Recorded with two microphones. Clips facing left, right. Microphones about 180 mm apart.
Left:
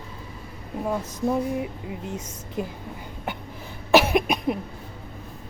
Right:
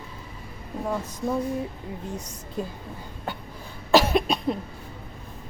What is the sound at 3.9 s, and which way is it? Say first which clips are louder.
Cough: left 1 dB; 15° left (ahead or behind).